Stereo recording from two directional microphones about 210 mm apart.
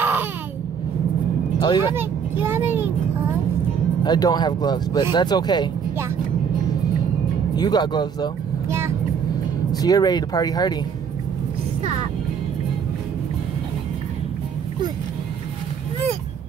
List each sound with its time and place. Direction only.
0.0 s a sound: 10° right (ahead or behind)
1.6 s speech: 20° left (ahead or behind)
2.0 s vehicle: 10° right (ahead or behind)
4.0 s speech: 20° left (ahead or behind)
7.5 s speech: 20° left (ahead or behind)
8.6 s vehicle: 10° right (ahead or behind)
9.7 s speech: 20° left (ahead or behind)